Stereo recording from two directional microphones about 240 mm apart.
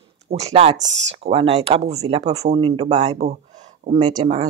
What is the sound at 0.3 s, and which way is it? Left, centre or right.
A woman's voice, right.